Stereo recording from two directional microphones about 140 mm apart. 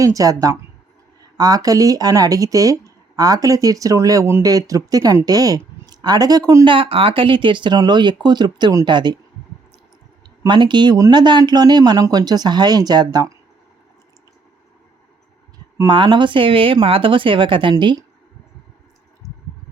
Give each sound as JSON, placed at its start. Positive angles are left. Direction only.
{"t": 0.0, "sound": "speech", "side_deg": -25}
{"t": 6.7, "sound": "speech", "side_deg": -40}
{"t": 10.4, "sound": "speech", "side_deg": -35}
{"t": 15.9, "sound": "speech", "side_deg": -35}